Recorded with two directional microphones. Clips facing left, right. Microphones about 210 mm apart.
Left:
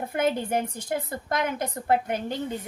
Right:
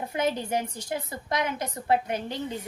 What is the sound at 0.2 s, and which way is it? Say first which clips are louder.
A woman's voice: left 2 dB; 55° left (ahead or behind).